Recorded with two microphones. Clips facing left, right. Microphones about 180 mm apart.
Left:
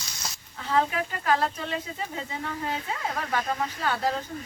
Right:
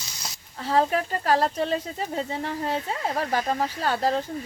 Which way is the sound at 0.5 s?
35° right (ahead or behind).